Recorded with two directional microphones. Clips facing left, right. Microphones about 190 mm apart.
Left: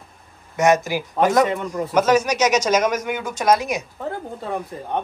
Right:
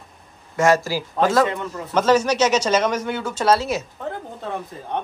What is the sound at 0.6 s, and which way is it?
Speech, 20° left (ahead or behind).